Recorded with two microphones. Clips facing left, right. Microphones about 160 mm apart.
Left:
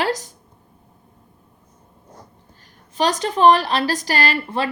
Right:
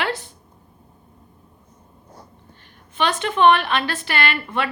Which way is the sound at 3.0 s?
40° left (ahead or behind).